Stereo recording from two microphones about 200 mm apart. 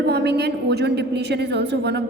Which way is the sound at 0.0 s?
55° right (ahead or behind).